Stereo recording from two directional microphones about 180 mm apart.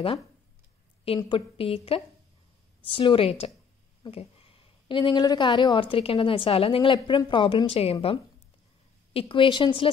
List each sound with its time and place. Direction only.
1.0 s a woman's voice: 30° left (ahead or behind)